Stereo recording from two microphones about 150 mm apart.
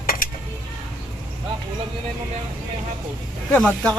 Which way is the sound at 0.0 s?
70° left (ahead or behind).